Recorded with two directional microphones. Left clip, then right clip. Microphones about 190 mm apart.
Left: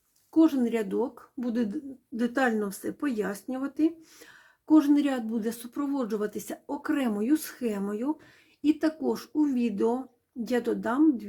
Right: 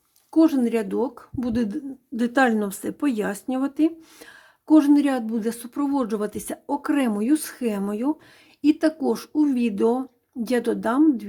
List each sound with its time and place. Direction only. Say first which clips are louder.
0.3 s speech: right 4 dB; 25° right (ahead or behind)